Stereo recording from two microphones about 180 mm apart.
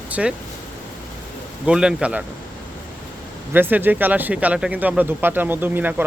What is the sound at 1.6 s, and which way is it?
Speech, 5° right (ahead or behind).